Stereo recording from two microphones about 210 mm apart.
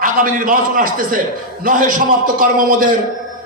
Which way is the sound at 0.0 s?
40° right (ahead or behind).